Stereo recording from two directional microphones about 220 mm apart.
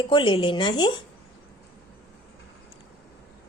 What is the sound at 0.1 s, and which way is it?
Speech, 20° left (ahead or behind).